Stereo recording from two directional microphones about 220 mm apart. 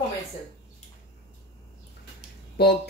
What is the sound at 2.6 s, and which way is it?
Speech, 45° left (ahead or behind).